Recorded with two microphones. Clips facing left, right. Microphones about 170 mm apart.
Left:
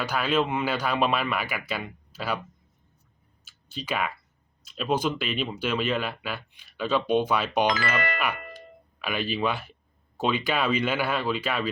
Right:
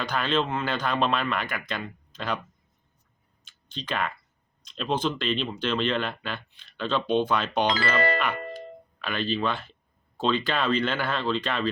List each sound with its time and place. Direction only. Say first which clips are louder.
0.0 s speech: left 1 dB; 10° left (ahead or behind)
3.4 s clicking: left 1 dB; 5° left (ahead or behind)
4.6 s speech: left 1 dB; 5° left (ahead or behind)
7.7 s speech: right 3 dB; 30° right (ahead or behind)
9.0 s speech: even; 10° left (ahead or behind)